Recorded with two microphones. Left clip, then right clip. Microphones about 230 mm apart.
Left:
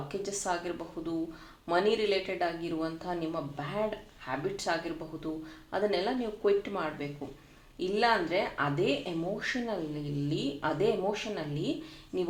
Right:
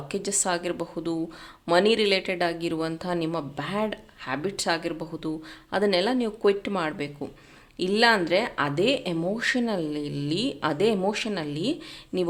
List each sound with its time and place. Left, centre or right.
0.1 s speech: right